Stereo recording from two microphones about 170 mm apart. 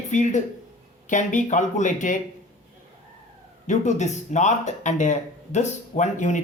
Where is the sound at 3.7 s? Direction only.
45° left (ahead or behind).